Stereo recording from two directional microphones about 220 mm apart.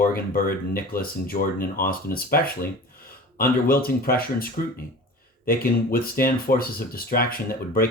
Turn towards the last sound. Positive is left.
turn(degrees=40)  # may be behind; listen again after turning